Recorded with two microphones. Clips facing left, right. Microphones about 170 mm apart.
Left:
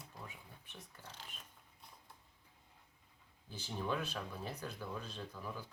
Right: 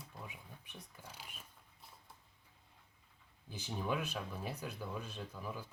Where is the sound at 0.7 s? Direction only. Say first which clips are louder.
Even; 10° right (ahead or behind).